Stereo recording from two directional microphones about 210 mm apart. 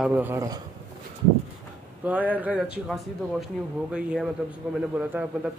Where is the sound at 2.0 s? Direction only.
5° right (ahead or behind).